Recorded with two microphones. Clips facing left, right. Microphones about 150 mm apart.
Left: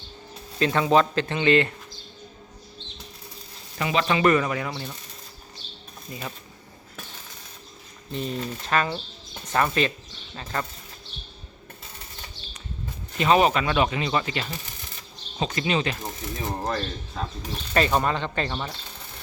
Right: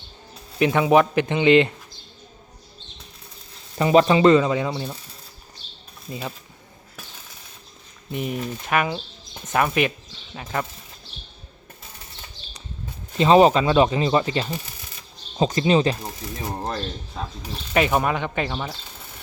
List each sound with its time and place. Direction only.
0.6 s speech: 15° right (ahead or behind)
3.8 s speech: 35° right (ahead or behind)
8.1 s speech: 15° right (ahead or behind)
13.1 s speech: 30° right (ahead or behind)
16.0 s speech: 10° right (ahead or behind)